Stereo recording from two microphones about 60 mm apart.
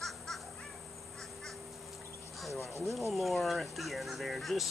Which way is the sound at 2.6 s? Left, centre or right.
Left.